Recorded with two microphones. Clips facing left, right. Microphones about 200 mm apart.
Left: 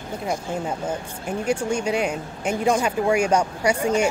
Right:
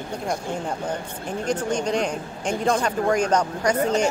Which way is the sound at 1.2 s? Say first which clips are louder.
Left 2 dB; 10° left (ahead or behind).